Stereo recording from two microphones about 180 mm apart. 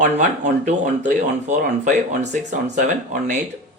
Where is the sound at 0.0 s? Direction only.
40° right (ahead or behind).